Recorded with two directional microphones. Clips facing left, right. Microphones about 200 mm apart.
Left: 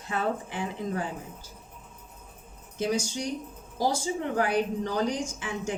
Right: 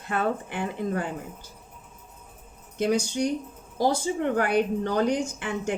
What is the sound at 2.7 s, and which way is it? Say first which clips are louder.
Speech: right 4 dB; 60° right (ahead or behind).